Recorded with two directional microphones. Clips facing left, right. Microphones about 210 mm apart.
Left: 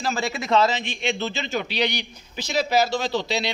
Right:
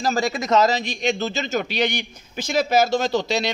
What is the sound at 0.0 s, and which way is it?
A man's voice, 40° right (ahead or behind).